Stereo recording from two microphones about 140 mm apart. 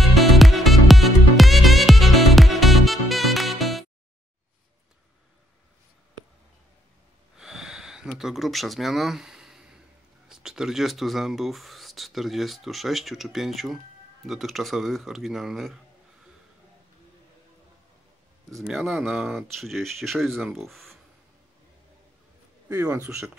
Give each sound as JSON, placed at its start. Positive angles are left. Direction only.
{"t": 0.0, "sound": "music", "side_deg": 0}
{"t": 7.3, "sound": "a sound", "side_deg": -5}
{"t": 10.2, "sound": "speech", "side_deg": -5}
{"t": 18.5, "sound": "speech", "side_deg": 0}
{"t": 22.7, "sound": "speech", "side_deg": -25}